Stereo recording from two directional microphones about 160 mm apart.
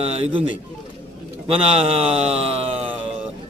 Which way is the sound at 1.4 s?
40° right (ahead or behind).